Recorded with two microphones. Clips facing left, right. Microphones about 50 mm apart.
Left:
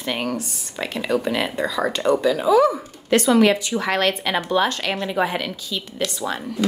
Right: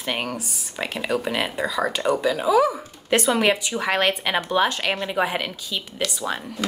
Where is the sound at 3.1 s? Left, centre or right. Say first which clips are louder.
Left 4 dB; centre.